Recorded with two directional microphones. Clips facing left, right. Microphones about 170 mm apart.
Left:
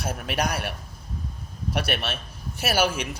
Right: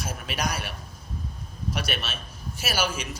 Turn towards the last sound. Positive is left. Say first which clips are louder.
# left 5 dB
turn(degrees=60)  # may be behind; listen again after turning